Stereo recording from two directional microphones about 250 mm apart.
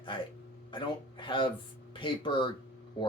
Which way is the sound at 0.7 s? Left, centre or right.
Centre.